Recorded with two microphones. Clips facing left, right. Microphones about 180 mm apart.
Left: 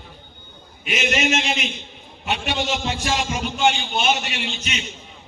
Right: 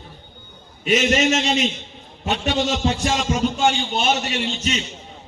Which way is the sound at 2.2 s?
40° right (ahead or behind).